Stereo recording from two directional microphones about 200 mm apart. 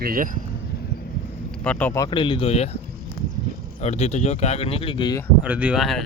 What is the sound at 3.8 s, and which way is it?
Speech, 35° left (ahead or behind).